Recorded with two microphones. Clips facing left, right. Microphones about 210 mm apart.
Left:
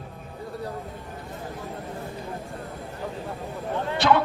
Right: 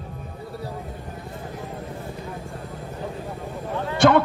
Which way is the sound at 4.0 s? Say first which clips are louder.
Right 5 dB; 50° right (ahead or behind).